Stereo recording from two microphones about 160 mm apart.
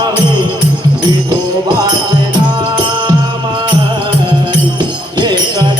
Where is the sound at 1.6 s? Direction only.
25° right (ahead or behind).